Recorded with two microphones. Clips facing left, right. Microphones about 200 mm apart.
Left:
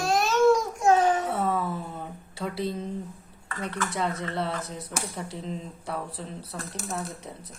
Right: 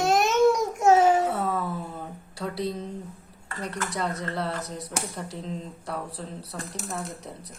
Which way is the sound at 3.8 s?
Centre (ahead or behind).